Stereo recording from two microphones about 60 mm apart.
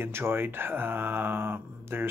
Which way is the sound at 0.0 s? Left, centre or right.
Right.